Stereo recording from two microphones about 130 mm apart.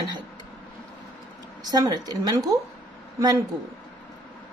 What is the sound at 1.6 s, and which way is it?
Speech, 30° right (ahead or behind).